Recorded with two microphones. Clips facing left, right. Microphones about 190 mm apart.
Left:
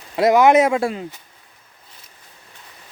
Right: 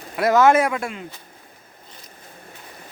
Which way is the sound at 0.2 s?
15° left (ahead or behind).